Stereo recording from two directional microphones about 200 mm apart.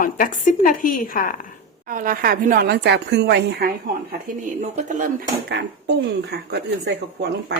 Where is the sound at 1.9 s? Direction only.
45° right (ahead or behind).